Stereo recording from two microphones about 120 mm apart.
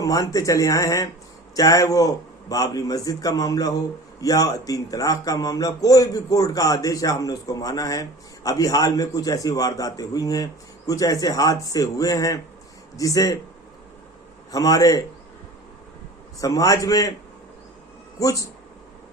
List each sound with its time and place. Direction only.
0.0 s a man's voice: 30° left (ahead or behind)
14.5 s a man's voice: 30° left (ahead or behind)
16.4 s a man's voice: 30° left (ahead or behind)
18.2 s a man's voice: 30° left (ahead or behind)